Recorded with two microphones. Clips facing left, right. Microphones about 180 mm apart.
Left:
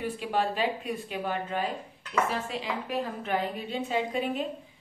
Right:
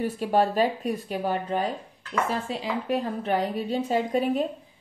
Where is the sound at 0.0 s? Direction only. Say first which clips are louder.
Right 6 dB; 40° right (ahead or behind).